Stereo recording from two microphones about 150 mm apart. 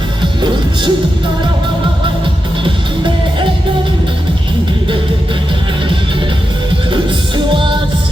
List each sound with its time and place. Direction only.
0.2 s music: 30° right (ahead or behind)
6.9 s music: 35° right (ahead or behind)